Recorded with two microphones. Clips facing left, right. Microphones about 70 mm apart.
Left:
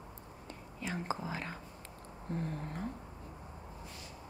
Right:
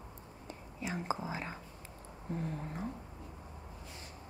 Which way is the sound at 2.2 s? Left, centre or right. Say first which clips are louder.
Even; centre.